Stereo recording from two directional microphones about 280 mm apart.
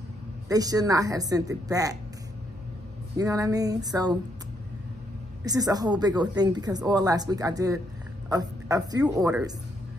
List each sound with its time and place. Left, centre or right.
0.5 s a woman's voice: centre
3.2 s a woman's voice: centre
5.4 s a woman's voice: centre